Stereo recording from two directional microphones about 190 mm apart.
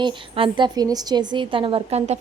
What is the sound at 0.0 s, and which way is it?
A woman's voice, 25° right (ahead or behind).